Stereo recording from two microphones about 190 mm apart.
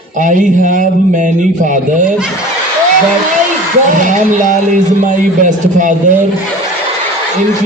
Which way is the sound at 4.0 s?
40° right (ahead or behind).